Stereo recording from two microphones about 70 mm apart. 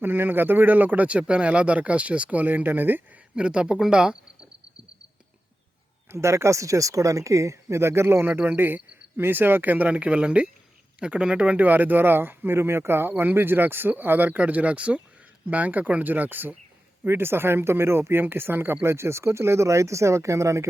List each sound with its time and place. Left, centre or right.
0.0 s speech: right
3.3 s speech: centre
6.1 s speech: right